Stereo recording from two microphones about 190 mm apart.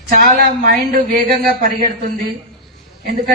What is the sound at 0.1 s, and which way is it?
Speech, 50° right (ahead or behind).